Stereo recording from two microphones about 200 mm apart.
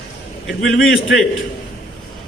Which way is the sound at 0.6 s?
70° left (ahead or behind).